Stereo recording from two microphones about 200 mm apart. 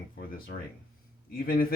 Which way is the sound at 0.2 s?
45° left (ahead or behind).